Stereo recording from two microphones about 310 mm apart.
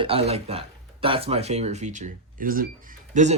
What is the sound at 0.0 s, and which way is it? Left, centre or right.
Speech, centre.